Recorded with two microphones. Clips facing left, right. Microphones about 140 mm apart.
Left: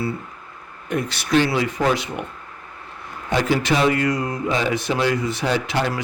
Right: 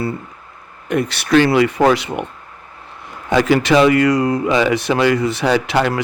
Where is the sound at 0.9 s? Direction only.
70° right (ahead or behind).